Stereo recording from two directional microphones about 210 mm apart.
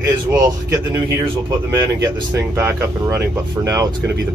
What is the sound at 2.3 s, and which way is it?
Speech, 10° right (ahead or behind).